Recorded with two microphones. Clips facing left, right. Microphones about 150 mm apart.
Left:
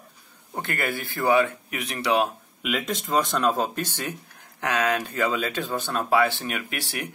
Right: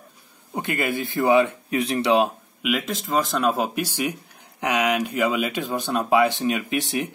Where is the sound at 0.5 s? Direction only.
15° right (ahead or behind).